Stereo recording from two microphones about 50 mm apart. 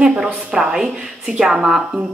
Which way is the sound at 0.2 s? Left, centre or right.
Centre.